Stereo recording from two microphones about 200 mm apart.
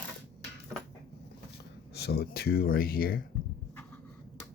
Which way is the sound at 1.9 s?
55° left (ahead or behind).